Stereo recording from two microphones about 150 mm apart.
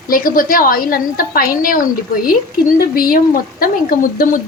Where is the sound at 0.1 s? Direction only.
70° left (ahead or behind).